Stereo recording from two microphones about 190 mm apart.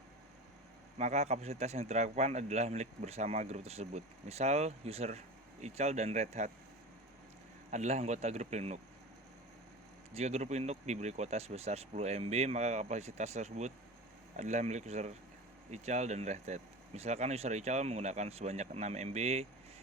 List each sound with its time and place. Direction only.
0.9 s speech: 35° right (ahead or behind)
7.7 s speech: 35° right (ahead or behind)
10.2 s speech: 35° right (ahead or behind)